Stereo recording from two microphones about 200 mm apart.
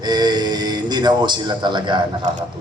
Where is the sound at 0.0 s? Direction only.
20° right (ahead or behind).